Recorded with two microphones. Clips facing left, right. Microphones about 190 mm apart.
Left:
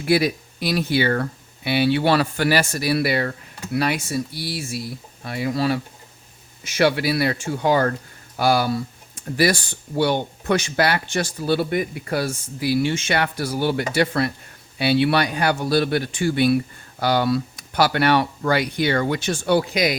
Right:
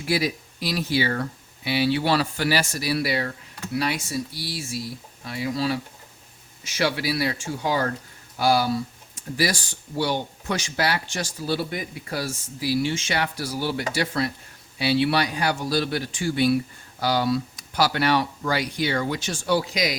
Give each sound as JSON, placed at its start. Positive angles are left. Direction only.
{"t": 0.0, "sound": "speech", "side_deg": 60}